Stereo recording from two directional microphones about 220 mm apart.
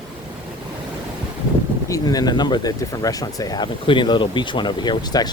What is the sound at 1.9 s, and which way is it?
Speech, 15° left (ahead or behind).